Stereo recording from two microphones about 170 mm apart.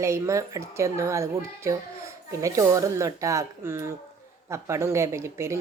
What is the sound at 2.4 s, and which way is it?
A woman's voice, 20° right (ahead or behind).